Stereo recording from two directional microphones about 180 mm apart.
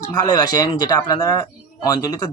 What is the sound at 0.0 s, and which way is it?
Speech, 20° left (ahead or behind).